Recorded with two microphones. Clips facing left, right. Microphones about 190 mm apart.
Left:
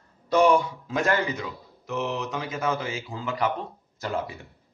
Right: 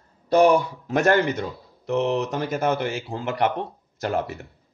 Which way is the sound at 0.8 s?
70° right (ahead or behind).